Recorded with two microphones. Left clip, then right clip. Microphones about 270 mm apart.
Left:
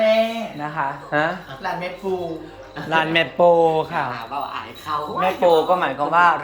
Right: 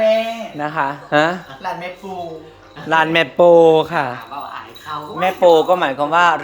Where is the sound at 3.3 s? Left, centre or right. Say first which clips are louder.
Right 6 dB; right.